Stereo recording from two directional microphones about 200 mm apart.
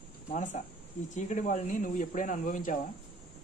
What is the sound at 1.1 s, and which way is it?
Speech, 40° left (ahead or behind).